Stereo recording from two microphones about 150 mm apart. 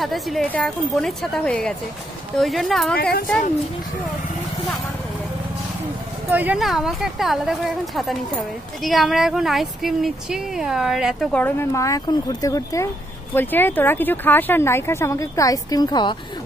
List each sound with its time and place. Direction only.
0.0 s speech: centre (ahead or behind)
3.0 s a woman's voice: 90° left
6.3 s speech: 10° right (ahead or behind)
11.3 s speech: 15° left (ahead or behind); by 16.2 s 30° left (ahead or behind)